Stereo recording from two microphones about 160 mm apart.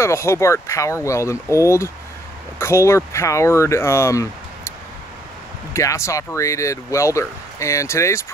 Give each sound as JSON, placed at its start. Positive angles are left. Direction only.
{"t": 0.0, "sound": "speech", "side_deg": 15}
{"t": 5.7, "sound": "speech", "side_deg": 20}